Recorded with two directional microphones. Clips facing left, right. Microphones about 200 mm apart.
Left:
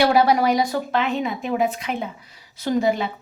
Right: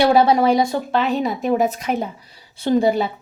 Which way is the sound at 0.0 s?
25° right (ahead or behind).